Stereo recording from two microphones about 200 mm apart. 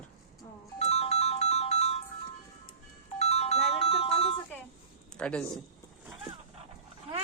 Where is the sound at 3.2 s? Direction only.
30° left (ahead or behind).